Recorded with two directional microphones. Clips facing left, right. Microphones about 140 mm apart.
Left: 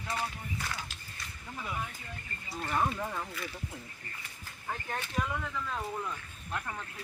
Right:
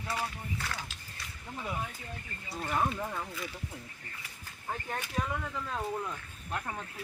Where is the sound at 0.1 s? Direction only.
5° right (ahead or behind).